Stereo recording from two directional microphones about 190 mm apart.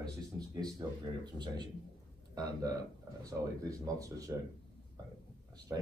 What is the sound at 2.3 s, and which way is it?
Speech, 20° right (ahead or behind).